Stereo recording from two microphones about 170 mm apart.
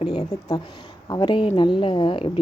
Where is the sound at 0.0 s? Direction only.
25° left (ahead or behind).